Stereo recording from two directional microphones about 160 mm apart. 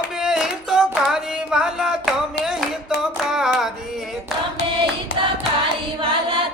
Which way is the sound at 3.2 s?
Centre (ahead or behind).